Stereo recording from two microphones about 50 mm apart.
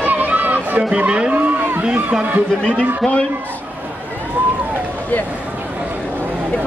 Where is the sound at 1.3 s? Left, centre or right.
Right.